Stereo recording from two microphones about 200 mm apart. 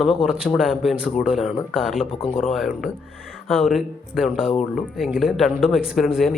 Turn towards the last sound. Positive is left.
turn(degrees=0)  # may be behind; listen again after turning